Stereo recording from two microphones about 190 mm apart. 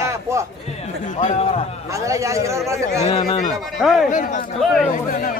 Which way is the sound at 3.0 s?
35° left (ahead or behind).